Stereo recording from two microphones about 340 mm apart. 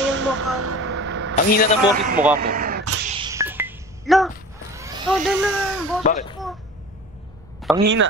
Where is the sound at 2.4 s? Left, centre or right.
Right.